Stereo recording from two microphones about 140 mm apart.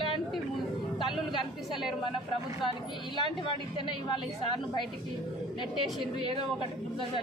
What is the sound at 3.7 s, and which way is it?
Speech, 35° left (ahead or behind).